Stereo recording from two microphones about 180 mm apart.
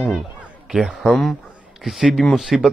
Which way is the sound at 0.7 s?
Centre (ahead or behind).